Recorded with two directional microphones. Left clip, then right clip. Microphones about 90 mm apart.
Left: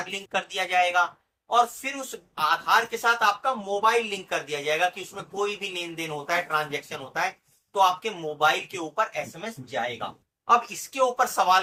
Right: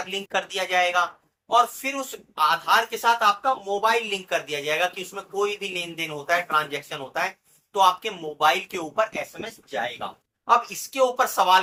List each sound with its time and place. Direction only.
0.1 s speech: 25° right (ahead or behind)
3.4 s speech: 20° right (ahead or behind)
9.4 s speech: 5° right (ahead or behind)
10.4 s speech: 25° right (ahead or behind)